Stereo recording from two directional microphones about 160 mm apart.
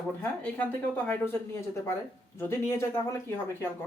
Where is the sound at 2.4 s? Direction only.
15° left (ahead or behind).